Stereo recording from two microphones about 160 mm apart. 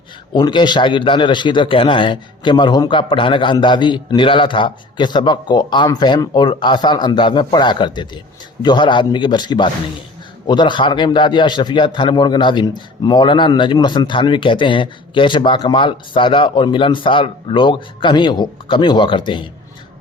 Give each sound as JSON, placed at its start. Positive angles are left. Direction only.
{"t": 0.3, "sound": "a man's voice", "side_deg": 30}